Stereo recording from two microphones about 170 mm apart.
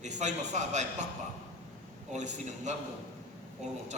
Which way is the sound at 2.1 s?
45° right (ahead or behind).